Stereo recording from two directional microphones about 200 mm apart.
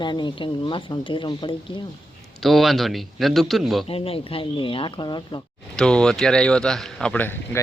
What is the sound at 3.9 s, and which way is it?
A woman's voice, 30° left (ahead or behind).